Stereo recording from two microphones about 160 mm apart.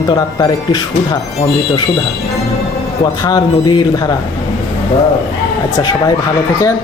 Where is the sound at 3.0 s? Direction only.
25° left (ahead or behind).